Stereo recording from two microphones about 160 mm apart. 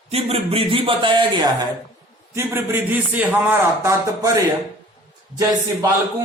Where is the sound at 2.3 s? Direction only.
15° right (ahead or behind).